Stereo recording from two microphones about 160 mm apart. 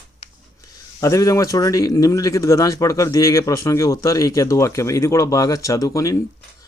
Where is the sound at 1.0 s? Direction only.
20° left (ahead or behind).